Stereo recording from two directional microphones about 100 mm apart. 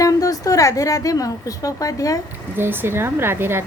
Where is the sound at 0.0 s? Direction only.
35° left (ahead or behind).